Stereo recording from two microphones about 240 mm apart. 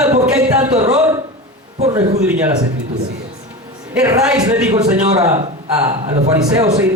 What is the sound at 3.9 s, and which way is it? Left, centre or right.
Speech, centre.